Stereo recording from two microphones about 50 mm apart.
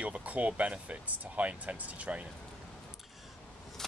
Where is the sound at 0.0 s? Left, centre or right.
Right.